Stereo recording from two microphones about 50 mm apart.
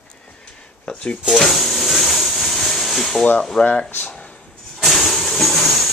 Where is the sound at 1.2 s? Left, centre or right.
Centre.